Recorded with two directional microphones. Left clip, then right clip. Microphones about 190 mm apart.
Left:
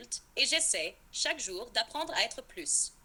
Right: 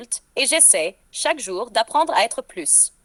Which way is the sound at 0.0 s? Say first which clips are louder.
Right 8 dB; 45° right (ahead or behind).